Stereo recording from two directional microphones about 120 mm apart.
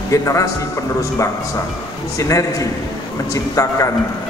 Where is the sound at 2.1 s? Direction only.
30° left (ahead or behind).